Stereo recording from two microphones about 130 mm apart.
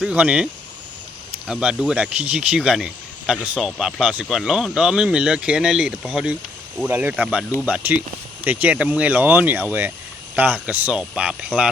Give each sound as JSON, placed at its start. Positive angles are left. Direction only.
{"t": 0.0, "sound": "speech", "side_deg": -10}
{"t": 1.5, "sound": "speech", "side_deg": -5}